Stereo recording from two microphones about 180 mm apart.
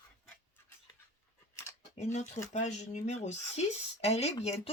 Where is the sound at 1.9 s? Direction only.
40° left (ahead or behind).